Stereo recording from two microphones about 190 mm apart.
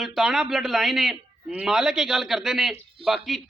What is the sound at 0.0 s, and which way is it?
A man's voice, centre (ahead or behind).